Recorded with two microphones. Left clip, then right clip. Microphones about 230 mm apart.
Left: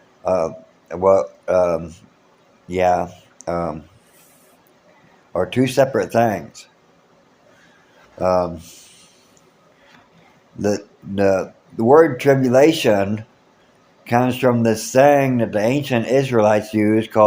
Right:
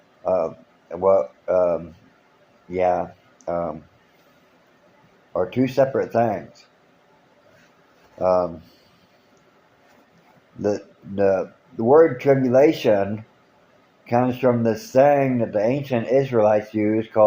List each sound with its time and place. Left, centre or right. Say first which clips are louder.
0.3 s speech: left 2 dB; left
5.3 s speech: left 3 dB; left
8.2 s speech: left 1 dB; left
10.6 s speech: left 2 dB; left